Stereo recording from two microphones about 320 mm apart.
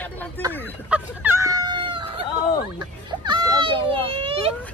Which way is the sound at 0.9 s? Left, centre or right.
Centre.